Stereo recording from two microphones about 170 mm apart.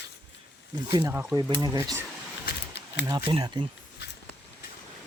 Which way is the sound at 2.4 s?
80° left.